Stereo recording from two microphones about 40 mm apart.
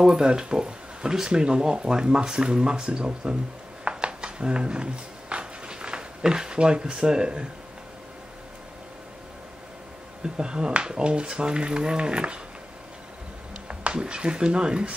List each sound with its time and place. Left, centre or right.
0.0 s speech: centre
3.8 s a sound: right
10.3 s speech: right
13.7 s speech: right